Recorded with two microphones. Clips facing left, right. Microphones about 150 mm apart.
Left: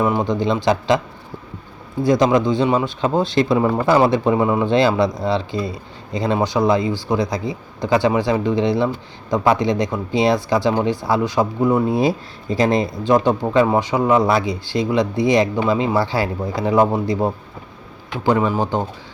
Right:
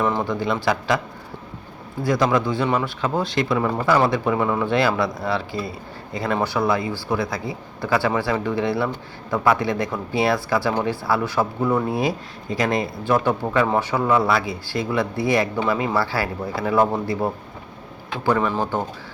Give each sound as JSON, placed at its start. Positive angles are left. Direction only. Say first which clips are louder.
{"t": 0.0, "sound": "speech", "louder": "left 4 dB", "side_deg": 15}
{"t": 2.0, "sound": "speech", "louder": "left 4 dB", "side_deg": 20}